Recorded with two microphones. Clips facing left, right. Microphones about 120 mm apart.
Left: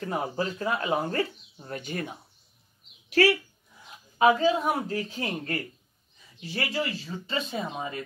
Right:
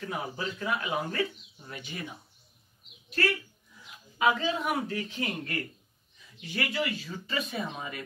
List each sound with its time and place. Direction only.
0.0 s speech: 40° left (ahead or behind)
3.1 s speech: 80° left
3.8 s speech: 35° left (ahead or behind)